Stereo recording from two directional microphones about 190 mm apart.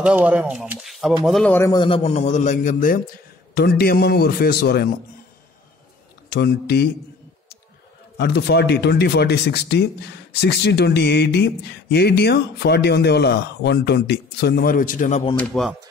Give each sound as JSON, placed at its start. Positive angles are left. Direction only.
{"t": 0.0, "sound": "speech", "side_deg": -5}
{"t": 1.8, "sound": "a man's voice", "side_deg": 30}
{"t": 3.5, "sound": "speech", "side_deg": 55}
{"t": 6.3, "sound": "speech", "side_deg": 60}
{"t": 8.2, "sound": "speech", "side_deg": 60}
{"t": 15.3, "sound": "speech", "side_deg": 0}